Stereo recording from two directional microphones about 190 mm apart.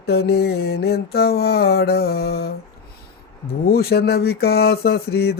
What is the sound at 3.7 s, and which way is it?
Mantra, 55° left (ahead or behind).